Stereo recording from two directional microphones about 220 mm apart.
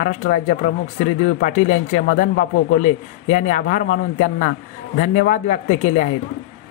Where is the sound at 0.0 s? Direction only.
35° left (ahead or behind).